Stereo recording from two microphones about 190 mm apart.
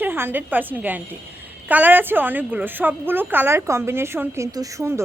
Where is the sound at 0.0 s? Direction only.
10° right (ahead or behind).